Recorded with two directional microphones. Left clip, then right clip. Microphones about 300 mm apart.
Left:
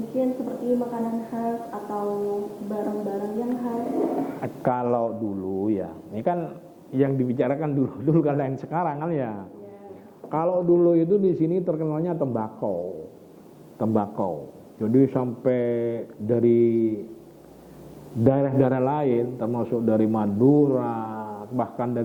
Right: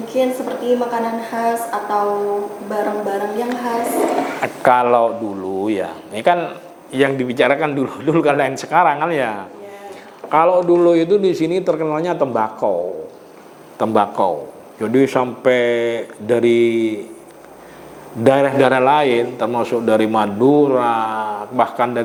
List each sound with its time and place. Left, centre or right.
0.2 s a woman's voice: centre
5.2 s speech: centre
5.6 s a woman's voice: centre
18.2 s a woman's voice: centre
20.4 s speech: right
20.7 s a woman's voice: centre